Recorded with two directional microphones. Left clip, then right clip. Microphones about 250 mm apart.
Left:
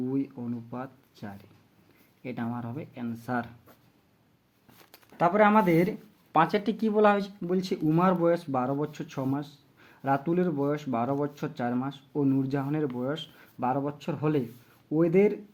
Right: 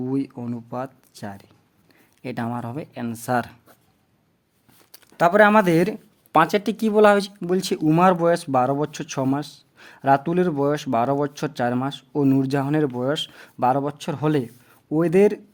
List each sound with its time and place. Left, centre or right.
0.0 s speech: right
5.1 s speech: right